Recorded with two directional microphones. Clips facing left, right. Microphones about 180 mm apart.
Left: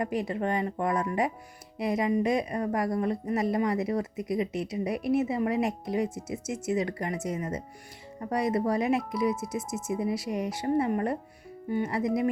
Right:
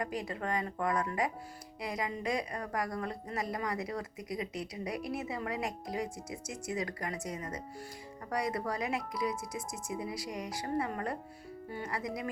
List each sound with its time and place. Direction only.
0.0 s speech: 25° left (ahead or behind)